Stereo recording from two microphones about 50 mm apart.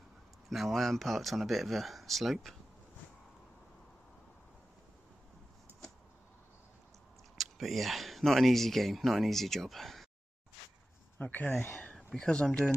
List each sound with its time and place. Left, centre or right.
0.5 s speech: centre
5.7 s a sound: right
7.3 s speech: centre
11.1 s speech: left
12.1 s speech: centre